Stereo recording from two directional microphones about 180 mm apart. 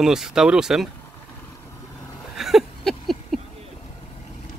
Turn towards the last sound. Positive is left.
turn(degrees=0)  # may be behind; listen again after turning